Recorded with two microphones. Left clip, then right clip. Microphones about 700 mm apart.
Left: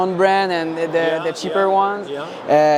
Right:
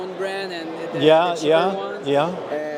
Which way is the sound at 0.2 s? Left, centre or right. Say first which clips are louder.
Left 11 dB; left.